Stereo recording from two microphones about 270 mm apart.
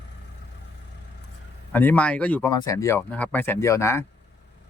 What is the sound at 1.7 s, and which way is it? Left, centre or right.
Speech, centre.